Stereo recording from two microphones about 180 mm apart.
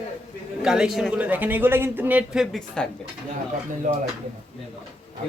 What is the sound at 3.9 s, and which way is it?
Speech, 45° right (ahead or behind).